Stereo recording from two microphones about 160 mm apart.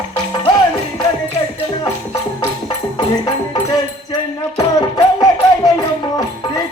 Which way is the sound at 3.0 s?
30° left (ahead or behind).